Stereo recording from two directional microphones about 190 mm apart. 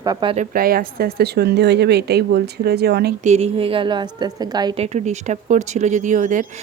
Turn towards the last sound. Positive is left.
turn(degrees=-40)  # may be behind; listen again after turning